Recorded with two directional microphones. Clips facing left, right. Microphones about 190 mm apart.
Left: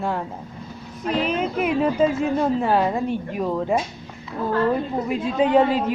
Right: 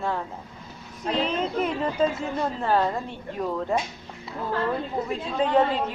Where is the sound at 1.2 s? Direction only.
10° left (ahead or behind).